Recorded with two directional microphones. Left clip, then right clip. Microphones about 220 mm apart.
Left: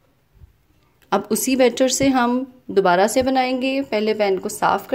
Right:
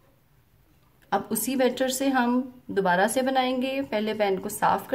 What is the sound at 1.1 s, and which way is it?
A woman's voice, 25° left (ahead or behind).